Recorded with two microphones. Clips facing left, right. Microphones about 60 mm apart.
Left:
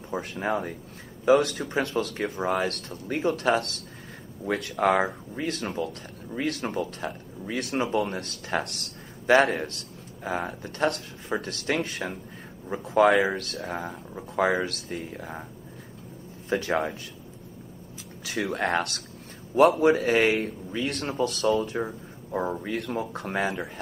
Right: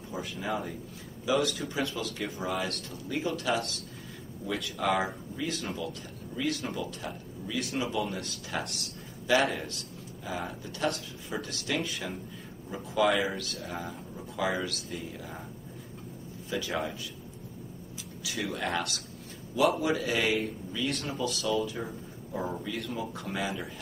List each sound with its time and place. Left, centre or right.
0.1 s speech: left
16.4 s speech: left
18.2 s speech: left
22.5 s speech: left